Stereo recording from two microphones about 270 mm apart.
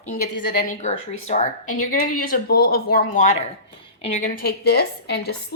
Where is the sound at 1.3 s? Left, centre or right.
Left.